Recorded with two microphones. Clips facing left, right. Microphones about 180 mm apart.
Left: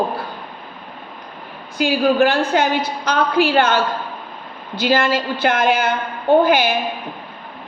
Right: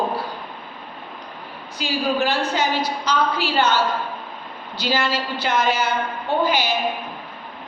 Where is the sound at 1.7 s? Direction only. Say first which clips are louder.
Left 7 dB; 55° left (ahead or behind).